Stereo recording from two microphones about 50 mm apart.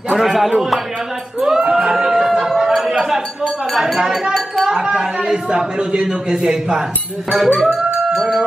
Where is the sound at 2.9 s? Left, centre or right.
Centre.